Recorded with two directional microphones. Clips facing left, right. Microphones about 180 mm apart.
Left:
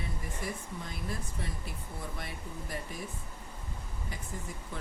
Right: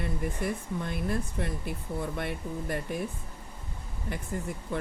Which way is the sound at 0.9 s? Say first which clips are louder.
Right 9 dB; 60° right (ahead or behind).